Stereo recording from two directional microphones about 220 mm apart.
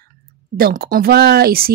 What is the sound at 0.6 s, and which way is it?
A woman's voice, 40° right (ahead or behind).